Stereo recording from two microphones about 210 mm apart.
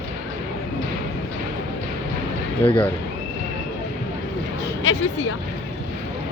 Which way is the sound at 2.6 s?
10° left (ahead or behind).